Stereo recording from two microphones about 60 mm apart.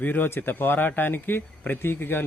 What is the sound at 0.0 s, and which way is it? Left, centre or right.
Speech, left.